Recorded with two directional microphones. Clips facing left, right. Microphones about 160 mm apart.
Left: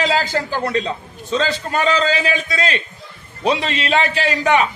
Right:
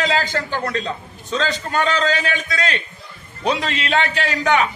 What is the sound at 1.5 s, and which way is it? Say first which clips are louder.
A man's voice: left 2 dB; 30° left (ahead or behind).